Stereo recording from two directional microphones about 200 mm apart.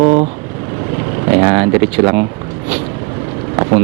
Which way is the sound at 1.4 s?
15° right (ahead or behind).